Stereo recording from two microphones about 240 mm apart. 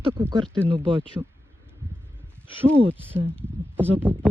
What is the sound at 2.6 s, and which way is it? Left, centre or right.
Speech, centre.